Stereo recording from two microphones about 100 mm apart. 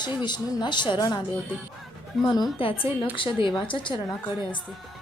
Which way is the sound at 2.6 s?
60° left (ahead or behind).